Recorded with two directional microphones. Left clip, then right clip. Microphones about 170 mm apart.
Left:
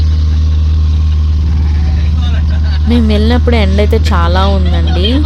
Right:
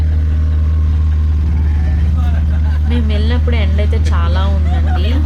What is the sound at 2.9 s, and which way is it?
Speech, 60° left (ahead or behind).